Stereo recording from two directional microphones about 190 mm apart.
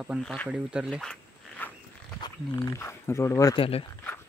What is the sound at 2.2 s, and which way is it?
Speech, 15° left (ahead or behind).